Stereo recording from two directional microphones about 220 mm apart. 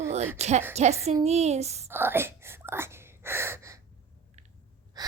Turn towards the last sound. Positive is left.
turn(degrees=-15)  # may be behind; listen again after turning